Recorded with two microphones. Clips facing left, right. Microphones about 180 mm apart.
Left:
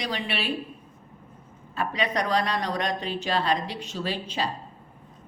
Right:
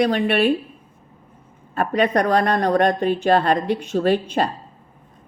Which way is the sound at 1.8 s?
55° right (ahead or behind).